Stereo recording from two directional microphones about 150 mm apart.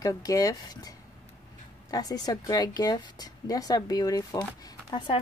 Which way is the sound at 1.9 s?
25° left (ahead or behind).